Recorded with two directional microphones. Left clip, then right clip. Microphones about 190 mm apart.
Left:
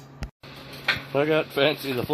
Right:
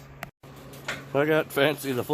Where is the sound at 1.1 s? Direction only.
15° right (ahead or behind).